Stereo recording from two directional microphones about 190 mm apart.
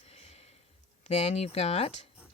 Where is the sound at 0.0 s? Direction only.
35° left (ahead or behind).